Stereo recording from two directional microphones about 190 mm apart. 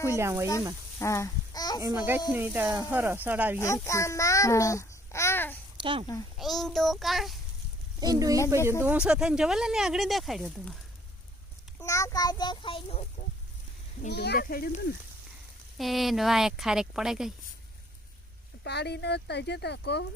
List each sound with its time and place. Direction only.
0.2 s speech: 15° right (ahead or behind)
0.9 s speech: 15° left (ahead or behind)
1.8 s speech: 15° right (ahead or behind)
3.8 s a child's voice: 15° left (ahead or behind)
5.7 s speech: 25° right (ahead or behind)
6.3 s speech: centre (ahead or behind)
8.0 s speech: 20° right (ahead or behind); by 10.8 s centre (ahead or behind)
11.8 s a child's voice: 15° left (ahead or behind)
14.1 s speech: 60° left (ahead or behind)
15.8 s speech: centre (ahead or behind)
18.6 s speech: 60° left (ahead or behind)